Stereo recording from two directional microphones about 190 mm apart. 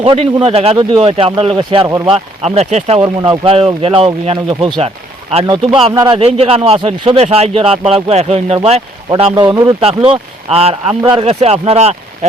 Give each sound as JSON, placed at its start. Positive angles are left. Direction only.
{"t": 0.0, "sound": "a man's voice", "side_deg": -30}
{"t": 9.3, "sound": "speech", "side_deg": -20}
{"t": 10.0, "sound": "a man's voice", "side_deg": -30}